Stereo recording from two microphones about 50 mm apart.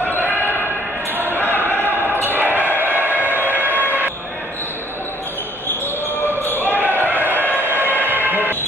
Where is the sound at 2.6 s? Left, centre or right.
Right.